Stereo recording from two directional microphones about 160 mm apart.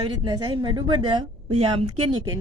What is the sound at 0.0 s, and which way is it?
Speech, 30° right (ahead or behind).